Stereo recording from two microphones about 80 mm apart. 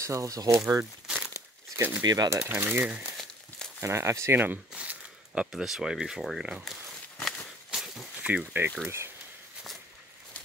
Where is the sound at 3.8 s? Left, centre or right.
Right.